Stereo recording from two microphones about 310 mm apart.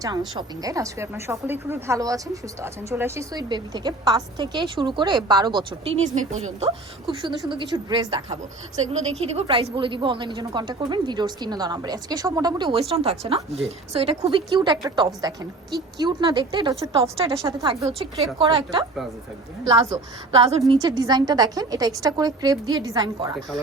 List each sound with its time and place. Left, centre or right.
0.3 s speech: centre